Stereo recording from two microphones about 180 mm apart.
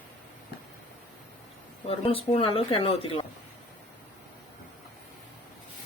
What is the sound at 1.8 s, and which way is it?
Speech, 30° left (ahead or behind).